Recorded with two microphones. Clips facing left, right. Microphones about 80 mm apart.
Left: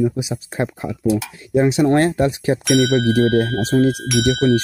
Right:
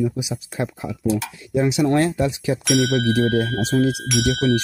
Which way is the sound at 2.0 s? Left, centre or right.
Left.